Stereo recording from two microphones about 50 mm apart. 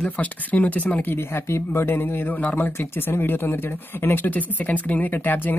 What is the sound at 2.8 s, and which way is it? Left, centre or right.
Speech, left.